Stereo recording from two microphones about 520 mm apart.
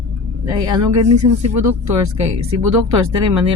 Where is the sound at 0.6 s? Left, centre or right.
Right.